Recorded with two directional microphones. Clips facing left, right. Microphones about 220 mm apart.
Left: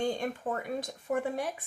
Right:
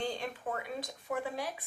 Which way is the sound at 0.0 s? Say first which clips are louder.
Left 5 dB; 50° left (ahead or behind).